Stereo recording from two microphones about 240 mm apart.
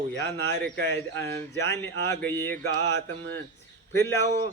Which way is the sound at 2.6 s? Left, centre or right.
Left.